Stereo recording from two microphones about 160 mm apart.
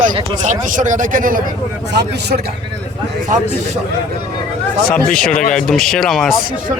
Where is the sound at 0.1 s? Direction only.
35° right (ahead or behind).